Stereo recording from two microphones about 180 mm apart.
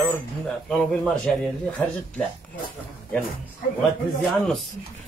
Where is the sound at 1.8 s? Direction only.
10° left (ahead or behind).